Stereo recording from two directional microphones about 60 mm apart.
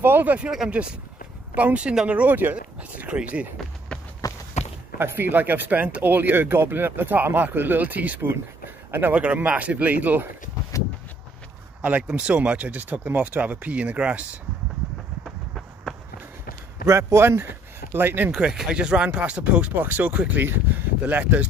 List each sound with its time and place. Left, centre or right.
0.0 s speech: right
1.5 s speech: right
4.2 s walk: left
4.9 s speech: right
10.7 s a sound: left
11.8 s speech: right
16.8 s speech: right
17.9 s speech: right
18.4 s speech: centre